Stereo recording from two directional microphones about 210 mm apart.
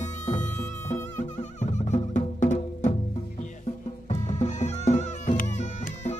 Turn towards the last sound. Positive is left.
turn(degrees=35)  # may be behind; listen again after turning